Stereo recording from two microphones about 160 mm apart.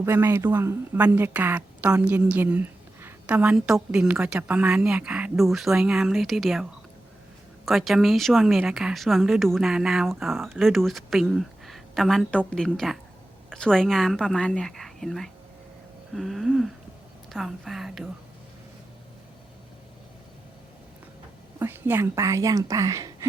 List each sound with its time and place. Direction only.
0.0 s a woman's voice: 15° right (ahead or behind)
21.6 s speech: 15° right (ahead or behind)